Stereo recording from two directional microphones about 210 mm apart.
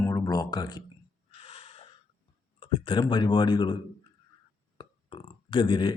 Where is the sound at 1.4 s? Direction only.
30° left (ahead or behind).